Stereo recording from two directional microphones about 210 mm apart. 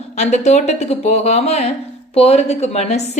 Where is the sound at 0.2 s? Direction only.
35° left (ahead or behind).